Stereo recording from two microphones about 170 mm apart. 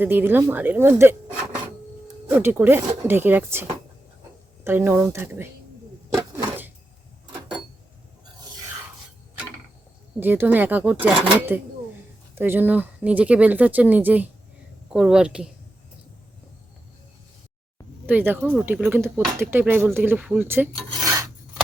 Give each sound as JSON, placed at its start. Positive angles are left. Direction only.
{"t": 0.0, "sound": "speech", "side_deg": -10}
{"t": 2.3, "sound": "speech", "side_deg": -10}
{"t": 6.1, "sound": "a sound", "side_deg": -15}
{"t": 10.2, "sound": "speech", "side_deg": -10}
{"t": 18.0, "sound": "speech", "side_deg": -10}
{"t": 20.7, "sound": "filing", "side_deg": -25}